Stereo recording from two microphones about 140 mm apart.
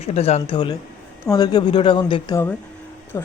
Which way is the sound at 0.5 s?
30° left (ahead or behind).